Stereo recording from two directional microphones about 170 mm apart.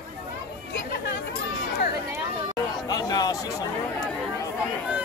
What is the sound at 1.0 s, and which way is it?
Chatter, 70° left (ahead or behind).